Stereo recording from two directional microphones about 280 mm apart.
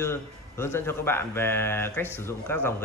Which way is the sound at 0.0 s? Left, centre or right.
Centre.